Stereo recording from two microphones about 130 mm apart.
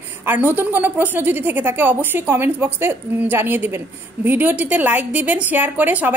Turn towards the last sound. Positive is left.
turn(degrees=-15)  # may be behind; listen again after turning